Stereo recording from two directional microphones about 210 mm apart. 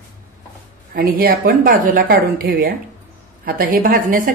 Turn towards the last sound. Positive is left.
turn(degrees=-40)  # may be behind; listen again after turning